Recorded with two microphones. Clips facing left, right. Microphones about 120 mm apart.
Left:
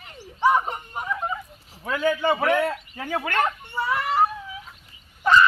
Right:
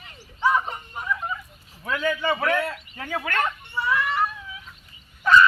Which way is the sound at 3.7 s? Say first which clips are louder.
Left 1 dB; 40° left (ahead or behind).